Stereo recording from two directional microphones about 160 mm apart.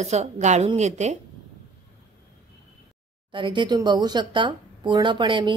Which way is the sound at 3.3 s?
30° right (ahead or behind).